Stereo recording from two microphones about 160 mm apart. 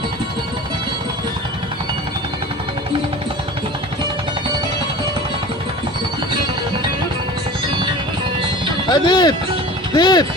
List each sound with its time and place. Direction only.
8.9 s speech: 25° left (ahead or behind)